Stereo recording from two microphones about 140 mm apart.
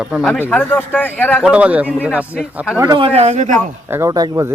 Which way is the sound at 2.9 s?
45° right (ahead or behind).